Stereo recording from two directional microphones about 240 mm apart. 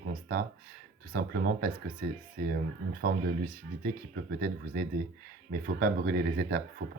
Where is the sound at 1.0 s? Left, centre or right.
Right.